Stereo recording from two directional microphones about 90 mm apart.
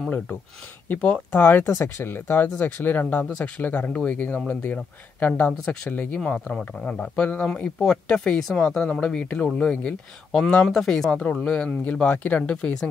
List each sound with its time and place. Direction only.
0.8 s speech: 20° left (ahead or behind)